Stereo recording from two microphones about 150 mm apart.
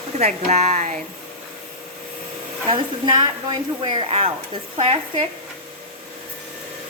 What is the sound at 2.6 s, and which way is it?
Speech, 40° right (ahead or behind).